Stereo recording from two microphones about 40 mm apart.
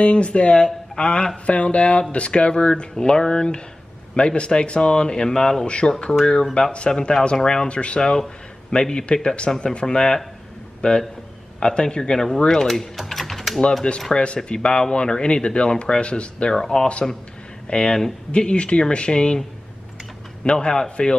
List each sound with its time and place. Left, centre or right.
0.0 s speech: left
5.3 s speech: centre
5.7 s speech: left; by 12.8 s centre
12.9 s typing: centre
14.1 s speech: left
16.5 s speech: centre
17.6 s speech: left
20.4 s speech: left